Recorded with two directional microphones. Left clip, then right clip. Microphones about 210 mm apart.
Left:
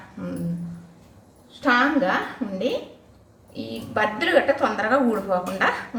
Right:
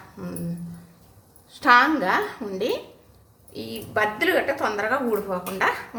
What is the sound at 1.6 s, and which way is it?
Speech, 20° right (ahead or behind).